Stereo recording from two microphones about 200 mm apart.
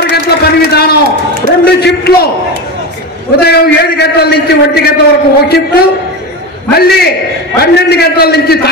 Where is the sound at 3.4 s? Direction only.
50° left (ahead or behind).